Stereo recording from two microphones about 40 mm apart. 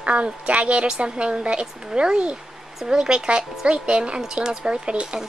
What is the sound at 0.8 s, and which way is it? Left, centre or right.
Speech, right.